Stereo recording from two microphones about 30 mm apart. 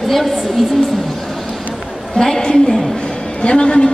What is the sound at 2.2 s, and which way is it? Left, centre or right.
Speech, centre.